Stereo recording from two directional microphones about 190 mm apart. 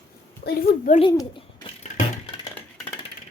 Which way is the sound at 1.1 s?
20° left (ahead or behind).